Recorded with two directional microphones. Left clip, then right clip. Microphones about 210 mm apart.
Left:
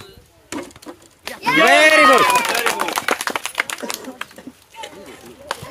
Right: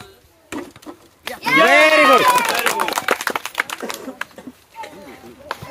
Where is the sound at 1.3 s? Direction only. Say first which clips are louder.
Left 1 dB; 35° right (ahead or behind).